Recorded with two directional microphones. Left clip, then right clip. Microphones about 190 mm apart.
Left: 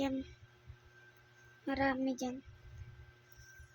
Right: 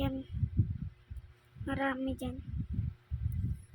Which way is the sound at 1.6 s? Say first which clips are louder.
Even; 5° left (ahead or behind).